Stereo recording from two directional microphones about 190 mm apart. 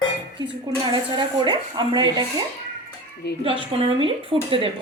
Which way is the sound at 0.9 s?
25° right (ahead or behind).